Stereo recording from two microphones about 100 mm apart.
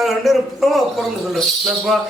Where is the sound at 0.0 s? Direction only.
5° right (ahead or behind).